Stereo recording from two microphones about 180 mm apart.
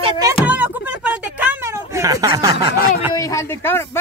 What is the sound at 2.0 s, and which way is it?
Speech, 20° right (ahead or behind).